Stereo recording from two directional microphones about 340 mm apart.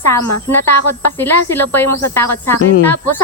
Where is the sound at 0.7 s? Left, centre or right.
Left.